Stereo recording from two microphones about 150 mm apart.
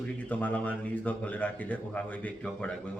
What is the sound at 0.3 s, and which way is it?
Speech, 10° left (ahead or behind).